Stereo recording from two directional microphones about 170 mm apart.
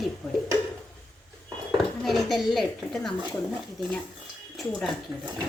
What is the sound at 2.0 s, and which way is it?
A child's voice, centre (ahead or behind).